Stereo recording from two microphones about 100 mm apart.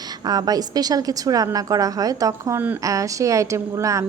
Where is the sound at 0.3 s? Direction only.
40° right (ahead or behind).